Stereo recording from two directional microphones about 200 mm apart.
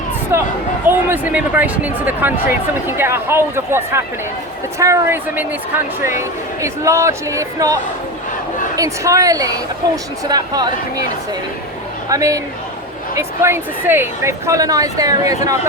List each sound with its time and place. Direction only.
0.3 s speech: 10° right (ahead or behind)
12.0 s speech: 15° right (ahead or behind)